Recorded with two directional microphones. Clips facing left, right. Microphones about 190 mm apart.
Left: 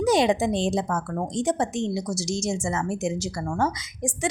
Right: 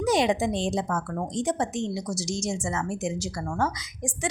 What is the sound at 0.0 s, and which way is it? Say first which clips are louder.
A woman's voice: left 3 dB; 30° left (ahead or behind).